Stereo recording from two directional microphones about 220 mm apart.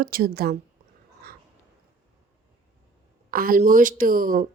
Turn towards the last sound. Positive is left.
turn(degrees=-40)  # may be behind; listen again after turning